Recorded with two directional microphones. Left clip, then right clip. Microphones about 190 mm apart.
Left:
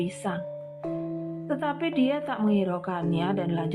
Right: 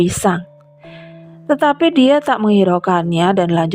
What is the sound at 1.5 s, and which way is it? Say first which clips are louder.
A woman's voice: right 16 dB; 55° right (ahead or behind).